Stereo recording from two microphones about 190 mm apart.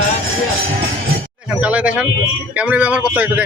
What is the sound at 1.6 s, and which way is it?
A man's voice, 5° right (ahead or behind).